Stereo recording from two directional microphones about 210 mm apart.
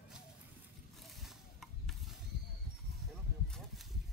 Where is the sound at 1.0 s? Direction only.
Centre (ahead or behind).